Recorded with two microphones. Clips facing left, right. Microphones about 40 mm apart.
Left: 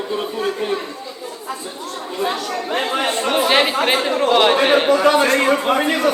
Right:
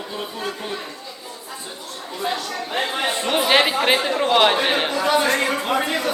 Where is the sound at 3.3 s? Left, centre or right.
Centre.